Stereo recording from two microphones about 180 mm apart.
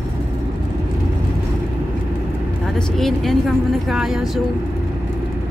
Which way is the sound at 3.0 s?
Centre (ahead or behind).